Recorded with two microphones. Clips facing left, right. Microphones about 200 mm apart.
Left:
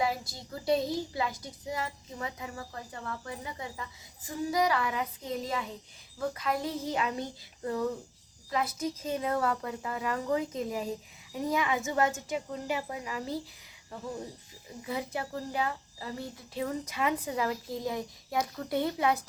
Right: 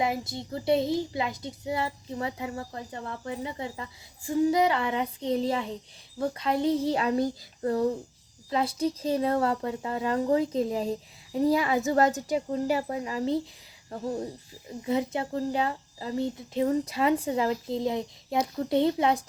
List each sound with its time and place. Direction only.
0.0 s a woman's voice: 25° right (ahead or behind); by 7.9 s 40° right (ahead or behind)
8.4 s a woman's voice: 30° right (ahead or behind)
14.8 s speech: 25° right (ahead or behind)